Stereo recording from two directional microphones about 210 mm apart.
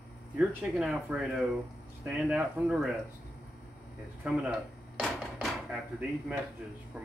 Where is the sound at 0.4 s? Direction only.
5° right (ahead or behind).